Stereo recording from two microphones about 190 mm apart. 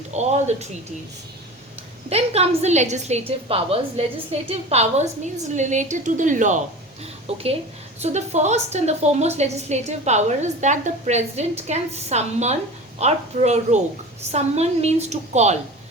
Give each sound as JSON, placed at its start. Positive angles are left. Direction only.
{"t": 0.1, "sound": "a woman's voice", "side_deg": -35}
{"t": 2.0, "sound": "a woman's voice", "side_deg": -35}
{"t": 7.3, "sound": "a woman's voice", "side_deg": -30}